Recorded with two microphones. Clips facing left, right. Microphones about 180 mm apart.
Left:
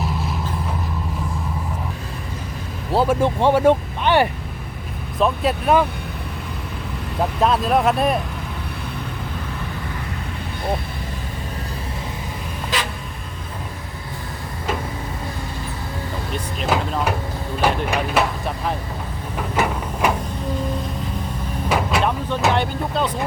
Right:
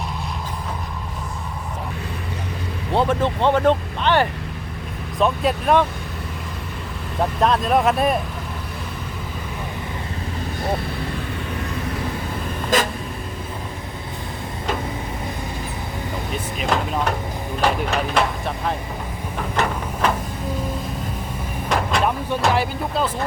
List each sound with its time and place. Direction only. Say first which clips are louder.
2.9 s speech: left 2 dB; 5° left (ahead or behind)
5.2 s speech: even; centre (ahead or behind)
7.2 s speech: even; centre (ahead or behind)
12.7 s vehicle: right 6 dB; 45° right (ahead or behind)
16.6 s speech: left 1 dB; 5° left (ahead or behind)
17.8 s speech: left 1 dB; 5° left (ahead or behind)
19.5 s a sound: left 2 dB; 10° left (ahead or behind)
21.7 s vehicle: left 1 dB; 5° left (ahead or behind)
22.4 s speech: left 1 dB; centre (ahead or behind)